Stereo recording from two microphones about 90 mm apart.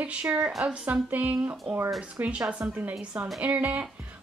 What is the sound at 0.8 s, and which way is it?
A woman's voice, 15° right (ahead or behind).